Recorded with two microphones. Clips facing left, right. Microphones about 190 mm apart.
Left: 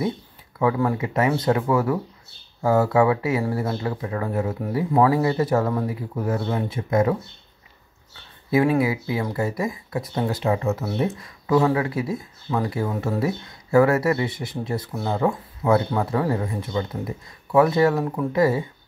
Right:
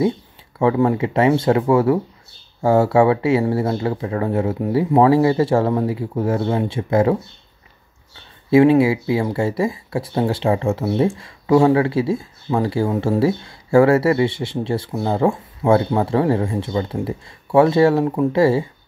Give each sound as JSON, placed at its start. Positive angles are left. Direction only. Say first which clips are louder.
{"t": 0.6, "sound": "speech", "louder": "right 5 dB", "side_deg": -25}
{"t": 8.5, "sound": "speech", "louder": "right 7 dB", "side_deg": -25}